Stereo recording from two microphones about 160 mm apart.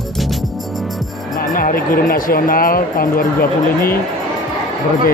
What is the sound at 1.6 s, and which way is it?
Music, 60° left (ahead or behind).